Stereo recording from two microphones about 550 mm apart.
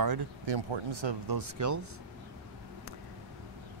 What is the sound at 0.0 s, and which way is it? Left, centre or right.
Speech, right.